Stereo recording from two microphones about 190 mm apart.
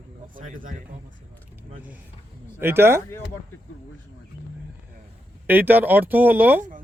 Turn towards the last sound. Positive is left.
turn(degrees=-10)  # may be behind; listen again after turning